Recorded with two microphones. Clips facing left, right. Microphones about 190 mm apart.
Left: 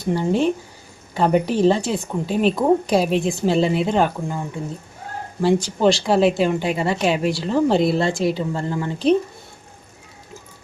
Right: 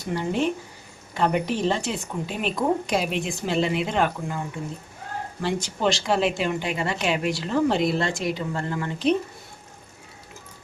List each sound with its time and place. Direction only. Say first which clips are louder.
0.0 s speech: left 5 dB; 30° left (ahead or behind)
5.4 s speech: left 8 dB; 35° left (ahead or behind)